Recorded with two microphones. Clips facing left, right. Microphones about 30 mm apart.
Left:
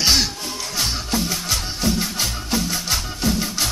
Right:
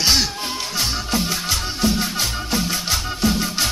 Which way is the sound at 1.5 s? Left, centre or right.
Centre.